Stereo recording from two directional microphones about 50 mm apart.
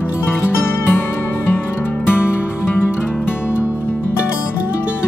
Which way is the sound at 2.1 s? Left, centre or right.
Left.